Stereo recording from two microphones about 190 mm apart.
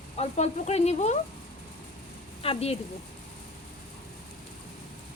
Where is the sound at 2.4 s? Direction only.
30° left (ahead or behind).